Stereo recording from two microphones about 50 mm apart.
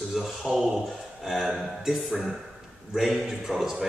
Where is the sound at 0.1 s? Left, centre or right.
Centre.